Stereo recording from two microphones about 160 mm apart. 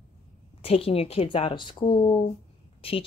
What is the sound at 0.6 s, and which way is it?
Speech, 35° left (ahead or behind).